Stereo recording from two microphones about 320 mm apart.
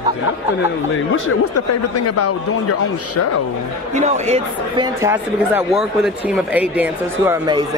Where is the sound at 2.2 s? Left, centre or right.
Left.